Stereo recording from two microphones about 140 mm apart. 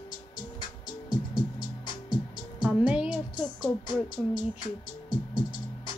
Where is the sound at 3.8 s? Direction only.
30° left (ahead or behind).